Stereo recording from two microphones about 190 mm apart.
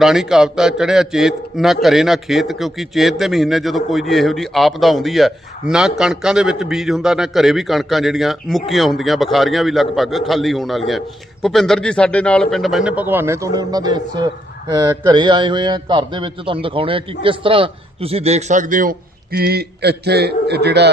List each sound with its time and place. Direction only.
0.0 s a man's voice: centre (ahead or behind); by 20.9 s 60° right (ahead or behind)